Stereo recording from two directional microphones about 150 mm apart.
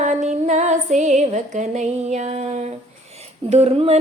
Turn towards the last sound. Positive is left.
turn(degrees=-40)  # may be behind; listen again after turning